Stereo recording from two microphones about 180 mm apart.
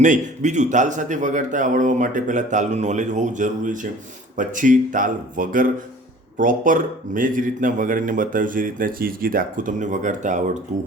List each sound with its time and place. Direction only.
0.0 s speech: 45° right (ahead or behind)